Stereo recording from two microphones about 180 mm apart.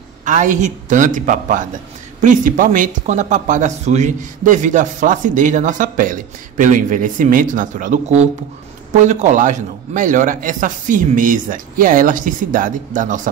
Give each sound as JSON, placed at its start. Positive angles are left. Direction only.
{"t": 0.2, "sound": "speech", "side_deg": -45}